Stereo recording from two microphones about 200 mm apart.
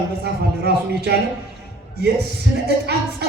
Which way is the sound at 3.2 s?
55° right (ahead or behind).